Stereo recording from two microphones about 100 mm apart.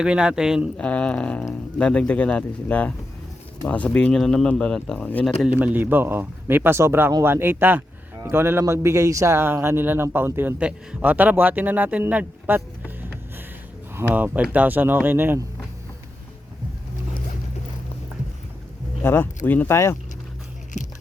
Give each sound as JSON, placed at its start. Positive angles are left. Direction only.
{"t": 0.0, "sound": "speech", "side_deg": -10}
{"t": 0.8, "sound": "speech", "side_deg": 10}
{"t": 5.5, "sound": "speech", "side_deg": -15}
{"t": 13.0, "sound": "a sound", "side_deg": -20}
{"t": 13.9, "sound": "speech", "side_deg": -15}
{"t": 19.0, "sound": "speech", "side_deg": 20}